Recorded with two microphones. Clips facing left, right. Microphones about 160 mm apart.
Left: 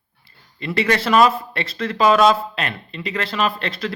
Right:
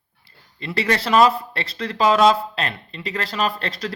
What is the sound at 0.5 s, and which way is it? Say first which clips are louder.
Speech: left 2 dB; 30° right (ahead or behind).